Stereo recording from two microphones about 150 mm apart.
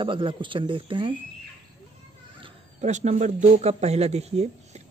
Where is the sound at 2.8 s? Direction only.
50° right (ahead or behind).